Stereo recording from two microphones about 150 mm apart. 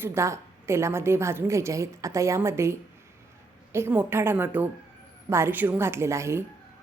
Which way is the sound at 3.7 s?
15° right (ahead or behind).